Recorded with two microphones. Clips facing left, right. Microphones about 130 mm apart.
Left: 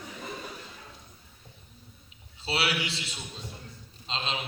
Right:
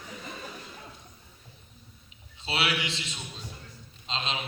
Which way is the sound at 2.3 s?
35° left (ahead or behind).